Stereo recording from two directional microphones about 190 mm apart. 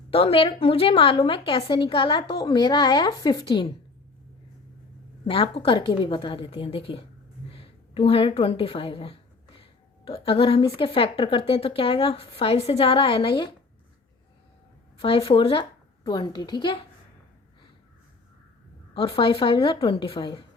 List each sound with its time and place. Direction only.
0.1 s a woman's voice: 30° left (ahead or behind)
5.2 s a woman's voice: 30° left (ahead or behind)
15.0 s a woman's voice: 30° left (ahead or behind)
18.9 s a woman's voice: 30° left (ahead or behind)